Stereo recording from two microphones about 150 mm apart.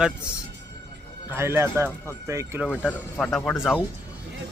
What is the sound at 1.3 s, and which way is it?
Speech, 15° right (ahead or behind).